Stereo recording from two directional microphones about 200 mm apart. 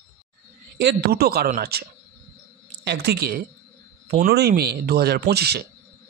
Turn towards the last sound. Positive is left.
turn(degrees=-55)  # may be behind; listen again after turning